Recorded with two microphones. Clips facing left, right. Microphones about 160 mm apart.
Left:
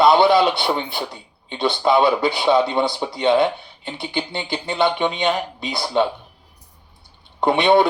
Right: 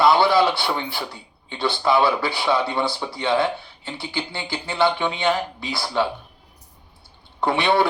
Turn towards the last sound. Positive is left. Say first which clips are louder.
# left 4 dB
turn(degrees=20)  # may be behind; listen again after turning